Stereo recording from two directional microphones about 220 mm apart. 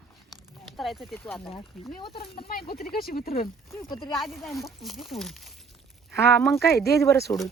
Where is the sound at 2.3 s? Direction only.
45° left (ahead or behind).